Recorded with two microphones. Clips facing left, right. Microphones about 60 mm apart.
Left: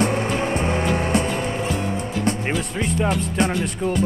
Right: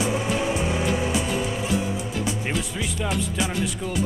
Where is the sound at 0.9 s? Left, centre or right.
Left.